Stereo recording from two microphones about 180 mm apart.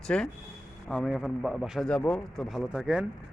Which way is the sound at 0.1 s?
5° left (ahead or behind).